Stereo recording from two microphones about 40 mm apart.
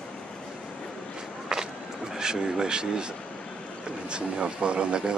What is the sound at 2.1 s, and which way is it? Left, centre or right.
Speech, centre.